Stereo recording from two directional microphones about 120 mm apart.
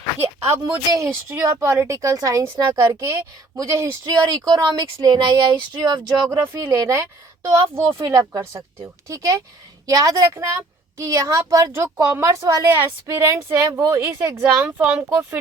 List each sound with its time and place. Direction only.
0.5 s a woman's voice: 25° right (ahead or behind)
6.2 s a woman's voice: 25° right (ahead or behind)